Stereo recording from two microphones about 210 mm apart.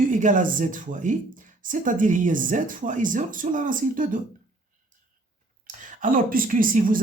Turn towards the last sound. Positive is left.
turn(degrees=-40)  # may be behind; listen again after turning